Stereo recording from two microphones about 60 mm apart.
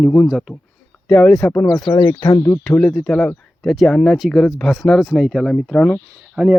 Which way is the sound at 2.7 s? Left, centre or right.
Left.